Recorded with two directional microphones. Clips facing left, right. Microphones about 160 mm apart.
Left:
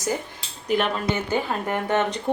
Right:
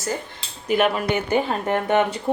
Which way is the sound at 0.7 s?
5° right (ahead or behind).